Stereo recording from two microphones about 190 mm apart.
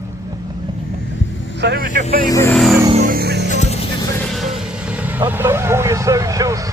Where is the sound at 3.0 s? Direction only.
55° right (ahead or behind).